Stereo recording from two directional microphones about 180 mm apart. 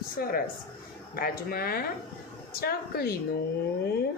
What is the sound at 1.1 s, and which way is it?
Speech, 55° left (ahead or behind).